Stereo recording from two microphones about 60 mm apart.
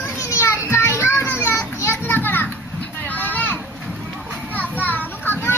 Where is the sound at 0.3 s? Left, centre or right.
Left.